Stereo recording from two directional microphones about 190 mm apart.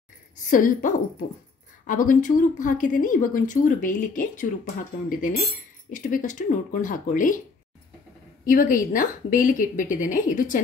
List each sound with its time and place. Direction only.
0.5 s speech: 45° left (ahead or behind)
8.5 s speech: 45° left (ahead or behind)